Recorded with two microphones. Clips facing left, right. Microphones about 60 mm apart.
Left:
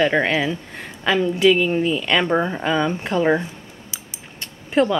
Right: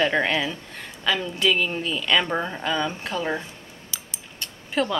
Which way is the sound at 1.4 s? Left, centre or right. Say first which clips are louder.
Left 8 dB; centre.